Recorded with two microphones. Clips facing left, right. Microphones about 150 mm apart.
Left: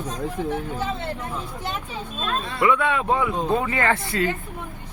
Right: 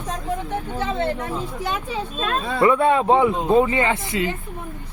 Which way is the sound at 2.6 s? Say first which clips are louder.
Right 5 dB; 35° right (ahead or behind).